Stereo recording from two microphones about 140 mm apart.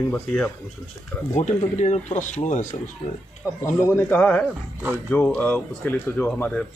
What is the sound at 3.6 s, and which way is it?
Speech, 15° left (ahead or behind).